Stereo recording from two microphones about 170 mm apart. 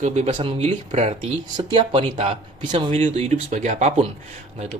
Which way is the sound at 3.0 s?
40° right (ahead or behind).